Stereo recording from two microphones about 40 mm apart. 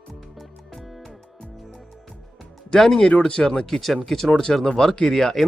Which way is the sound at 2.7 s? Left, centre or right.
Centre.